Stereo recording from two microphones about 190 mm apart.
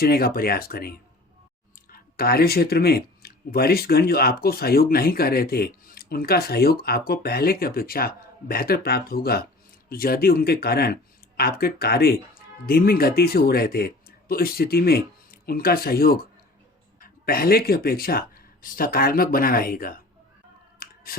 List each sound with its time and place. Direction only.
0.0 s speech: 55° left (ahead or behind)
20.7 s scissors: 50° left (ahead or behind)